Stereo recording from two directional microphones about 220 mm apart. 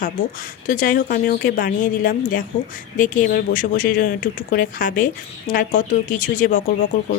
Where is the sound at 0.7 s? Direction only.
40° left (ahead or behind).